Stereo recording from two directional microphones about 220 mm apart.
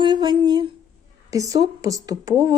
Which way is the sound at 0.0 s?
20° right (ahead or behind).